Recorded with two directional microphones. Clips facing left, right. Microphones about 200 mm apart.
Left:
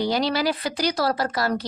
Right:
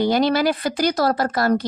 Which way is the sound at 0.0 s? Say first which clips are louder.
Right 5 dB; 50° right (ahead or behind).